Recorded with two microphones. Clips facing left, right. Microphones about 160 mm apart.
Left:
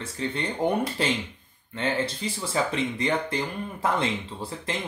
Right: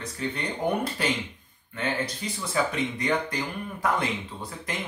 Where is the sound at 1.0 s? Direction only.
30° left (ahead or behind).